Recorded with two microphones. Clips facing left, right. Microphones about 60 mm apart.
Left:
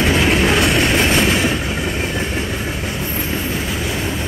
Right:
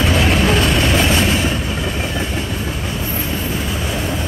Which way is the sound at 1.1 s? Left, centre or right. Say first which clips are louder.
Left 1 dB; left.